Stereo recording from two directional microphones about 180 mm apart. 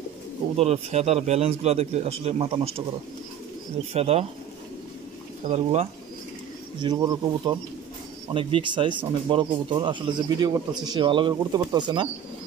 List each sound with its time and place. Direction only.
0.6 s a man's voice: 35° right (ahead or behind)
3.9 s a man's voice: 35° right (ahead or behind)
5.5 s a man's voice: 35° right (ahead or behind)
6.8 s speech: 25° right (ahead or behind)